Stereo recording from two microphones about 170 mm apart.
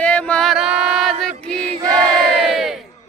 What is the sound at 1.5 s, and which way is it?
Choir, 5° left (ahead or behind).